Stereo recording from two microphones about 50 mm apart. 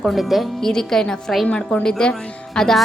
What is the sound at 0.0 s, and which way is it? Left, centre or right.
Speech, centre.